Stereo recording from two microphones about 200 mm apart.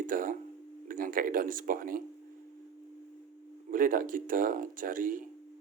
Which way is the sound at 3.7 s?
45° right (ahead or behind).